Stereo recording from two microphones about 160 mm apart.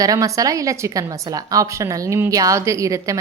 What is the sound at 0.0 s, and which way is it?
A woman's voice, 20° right (ahead or behind).